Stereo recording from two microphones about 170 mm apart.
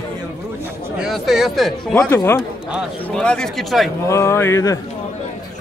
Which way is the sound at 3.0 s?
5° left (ahead or behind).